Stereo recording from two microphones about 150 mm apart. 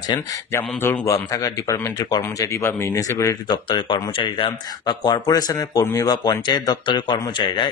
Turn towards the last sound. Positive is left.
turn(degrees=30)  # may be behind; listen again after turning